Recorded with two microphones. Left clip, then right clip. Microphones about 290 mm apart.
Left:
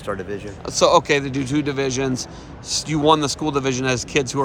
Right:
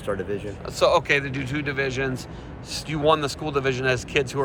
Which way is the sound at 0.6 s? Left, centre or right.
Left.